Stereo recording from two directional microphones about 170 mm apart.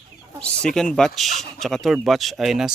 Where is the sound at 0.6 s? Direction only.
5° left (ahead or behind).